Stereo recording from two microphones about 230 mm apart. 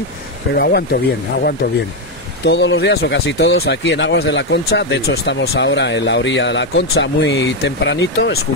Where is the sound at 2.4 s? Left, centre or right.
Left.